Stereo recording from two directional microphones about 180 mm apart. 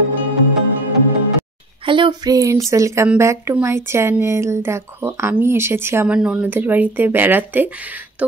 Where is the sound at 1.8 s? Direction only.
25° right (ahead or behind).